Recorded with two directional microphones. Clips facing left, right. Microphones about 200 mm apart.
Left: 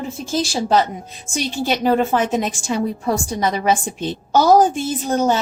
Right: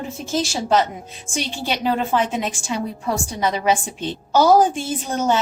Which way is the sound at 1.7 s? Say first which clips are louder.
Left 4 dB; 45° left (ahead or behind).